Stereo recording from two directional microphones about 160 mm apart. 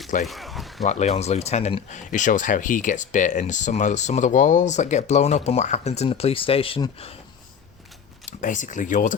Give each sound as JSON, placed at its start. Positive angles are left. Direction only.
{"t": 0.3, "sound": "a sound", "side_deg": 0}
{"t": 0.9, "sound": "speech", "side_deg": 45}
{"t": 8.2, "sound": "speech", "side_deg": 50}